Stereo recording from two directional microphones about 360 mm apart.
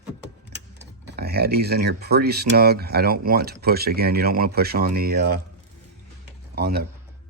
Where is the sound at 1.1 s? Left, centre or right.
Right.